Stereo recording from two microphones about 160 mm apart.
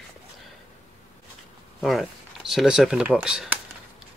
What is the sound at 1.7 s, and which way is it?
Speech, centre (ahead or behind).